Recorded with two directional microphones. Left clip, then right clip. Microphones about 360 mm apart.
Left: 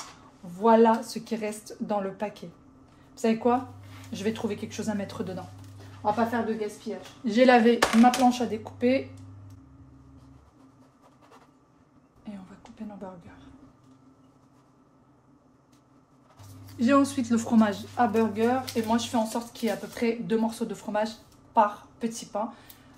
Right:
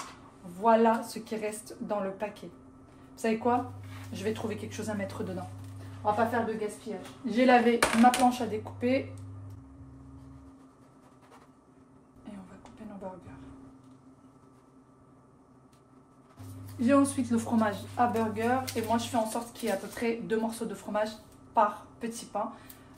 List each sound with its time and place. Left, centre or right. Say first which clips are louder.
0.6 s speech: left 4 dB; left
7.2 s speech: left 4 dB; left
16.8 s speech: left 2 dB; left